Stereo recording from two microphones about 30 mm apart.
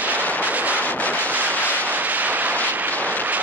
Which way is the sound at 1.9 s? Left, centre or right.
Right.